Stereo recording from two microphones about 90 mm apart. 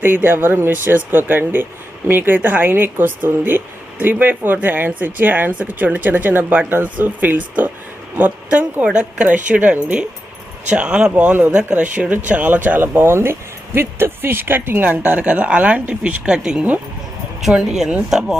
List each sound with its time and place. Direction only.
0.0 s speech: 20° right (ahead or behind); by 18.3 s 5° right (ahead or behind)